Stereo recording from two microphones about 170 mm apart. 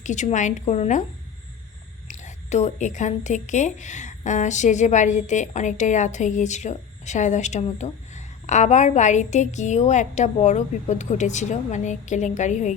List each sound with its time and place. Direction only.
0.0 s a woman's voice: 45° left (ahead or behind)
2.0 s a woman's voice: 45° left (ahead or behind)